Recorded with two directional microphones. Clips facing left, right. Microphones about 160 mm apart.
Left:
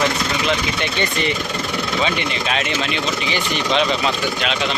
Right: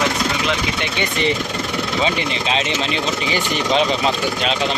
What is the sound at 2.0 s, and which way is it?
Speech, 25° right (ahead or behind).